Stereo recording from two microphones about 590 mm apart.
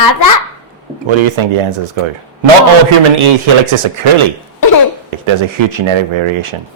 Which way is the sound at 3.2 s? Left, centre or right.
Right.